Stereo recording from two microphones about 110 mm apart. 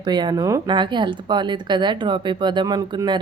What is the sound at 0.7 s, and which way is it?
Speech, 45° right (ahead or behind).